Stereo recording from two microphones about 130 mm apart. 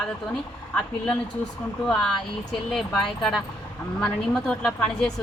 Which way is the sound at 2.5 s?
Centre (ahead or behind).